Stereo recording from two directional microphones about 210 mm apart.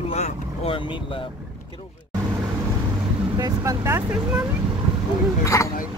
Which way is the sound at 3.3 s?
15° right (ahead or behind).